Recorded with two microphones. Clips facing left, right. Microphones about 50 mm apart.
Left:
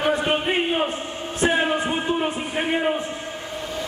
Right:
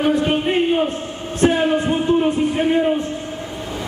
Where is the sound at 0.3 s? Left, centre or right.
Centre.